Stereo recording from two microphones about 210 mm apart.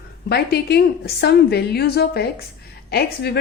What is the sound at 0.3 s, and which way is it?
A woman's voice, 50° left (ahead or behind).